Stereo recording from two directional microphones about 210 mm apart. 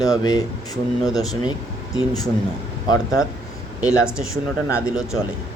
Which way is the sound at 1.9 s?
20° left (ahead or behind).